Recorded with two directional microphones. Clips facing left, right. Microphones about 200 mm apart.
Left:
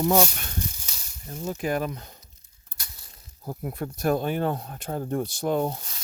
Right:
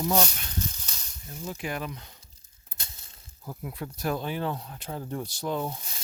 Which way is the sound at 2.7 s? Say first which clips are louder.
Right 1 dB; 25° right (ahead or behind).